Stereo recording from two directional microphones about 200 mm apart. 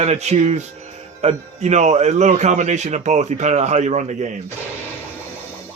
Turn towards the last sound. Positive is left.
turn(degrees=-35)  # may be behind; listen again after turning